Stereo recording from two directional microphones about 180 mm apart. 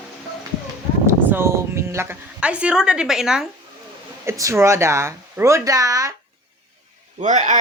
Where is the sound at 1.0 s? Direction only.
15° right (ahead or behind).